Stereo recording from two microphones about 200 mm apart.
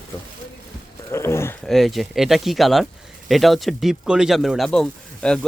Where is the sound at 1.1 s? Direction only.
15° left (ahead or behind).